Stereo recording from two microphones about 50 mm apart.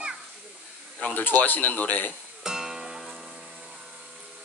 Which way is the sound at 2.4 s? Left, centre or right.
Centre.